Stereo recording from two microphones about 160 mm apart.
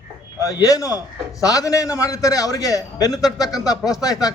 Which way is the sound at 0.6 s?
20° left (ahead or behind).